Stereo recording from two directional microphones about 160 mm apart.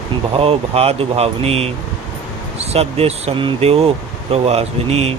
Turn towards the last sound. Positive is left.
turn(degrees=-40)  # may be behind; listen again after turning